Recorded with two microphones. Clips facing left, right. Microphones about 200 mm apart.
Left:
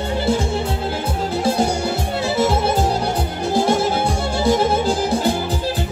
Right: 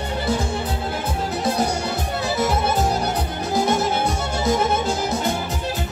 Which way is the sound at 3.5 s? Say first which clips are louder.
Left 3 dB; 30° left (ahead or behind).